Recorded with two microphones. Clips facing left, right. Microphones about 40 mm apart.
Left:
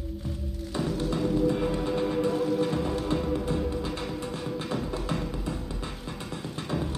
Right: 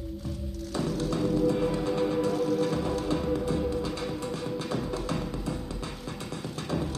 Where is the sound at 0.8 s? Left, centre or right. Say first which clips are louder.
Even; centre.